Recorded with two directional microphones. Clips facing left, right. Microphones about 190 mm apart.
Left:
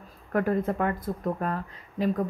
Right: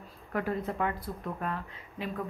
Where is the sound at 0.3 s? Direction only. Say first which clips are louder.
Left 7 dB; 50° left (ahead or behind).